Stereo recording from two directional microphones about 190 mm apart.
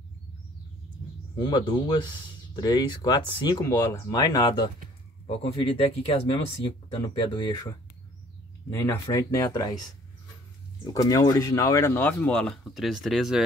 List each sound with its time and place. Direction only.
1.4 s speech: 25° left (ahead or behind)
10.8 s speech: 20° left (ahead or behind); by 13.4 s centre (ahead or behind)